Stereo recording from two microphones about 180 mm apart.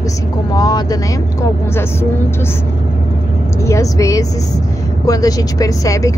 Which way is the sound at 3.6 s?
15° left (ahead or behind).